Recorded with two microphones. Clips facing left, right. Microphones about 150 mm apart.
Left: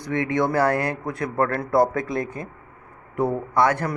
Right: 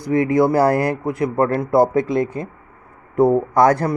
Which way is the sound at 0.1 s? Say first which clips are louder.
Right 7 dB; 30° right (ahead or behind).